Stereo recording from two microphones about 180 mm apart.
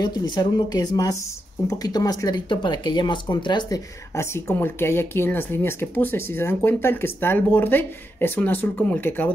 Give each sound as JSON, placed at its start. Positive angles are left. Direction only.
{"t": 0.0, "sound": "speech", "side_deg": 25}